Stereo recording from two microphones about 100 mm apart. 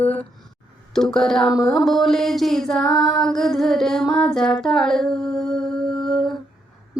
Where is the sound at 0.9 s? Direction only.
5° left (ahead or behind).